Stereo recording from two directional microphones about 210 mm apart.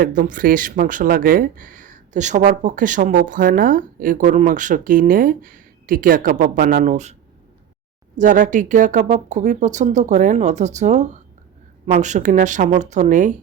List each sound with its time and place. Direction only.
0.0 s speech: 40° right (ahead or behind)